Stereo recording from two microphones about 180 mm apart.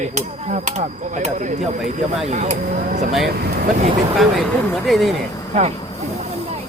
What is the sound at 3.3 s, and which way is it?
Speech, 60° right (ahead or behind).